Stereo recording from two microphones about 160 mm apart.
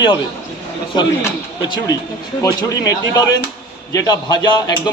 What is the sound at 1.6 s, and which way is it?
Speech, 30° left (ahead or behind).